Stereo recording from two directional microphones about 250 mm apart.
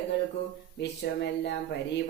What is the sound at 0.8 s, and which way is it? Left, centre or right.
Mantra, left.